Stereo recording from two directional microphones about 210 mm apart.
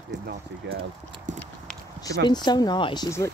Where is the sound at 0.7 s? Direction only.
55° right (ahead or behind).